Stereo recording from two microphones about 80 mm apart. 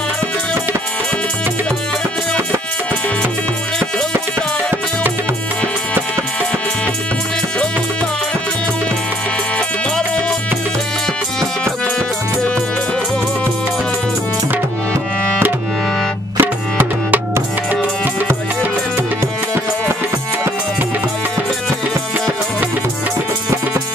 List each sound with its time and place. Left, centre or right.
16.3 s music: right